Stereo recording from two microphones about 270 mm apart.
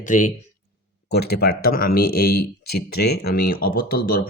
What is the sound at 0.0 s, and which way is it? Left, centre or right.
Speech, left.